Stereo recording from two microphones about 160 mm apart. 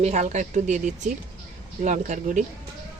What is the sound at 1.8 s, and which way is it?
Speech, 50° right (ahead or behind).